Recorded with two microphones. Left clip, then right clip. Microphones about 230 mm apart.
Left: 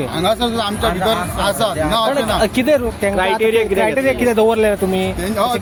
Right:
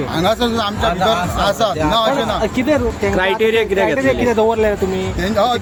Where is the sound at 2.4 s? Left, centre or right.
Left.